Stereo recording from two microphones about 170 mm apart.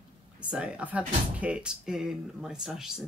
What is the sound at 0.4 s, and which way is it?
Speech, 5° right (ahead or behind).